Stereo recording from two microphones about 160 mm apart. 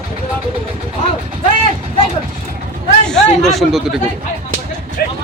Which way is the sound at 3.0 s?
5° left (ahead or behind).